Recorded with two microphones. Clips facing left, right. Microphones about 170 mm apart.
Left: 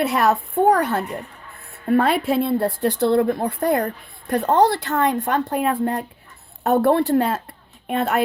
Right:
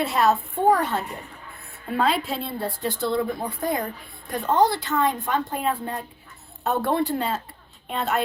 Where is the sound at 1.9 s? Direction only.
55° left (ahead or behind).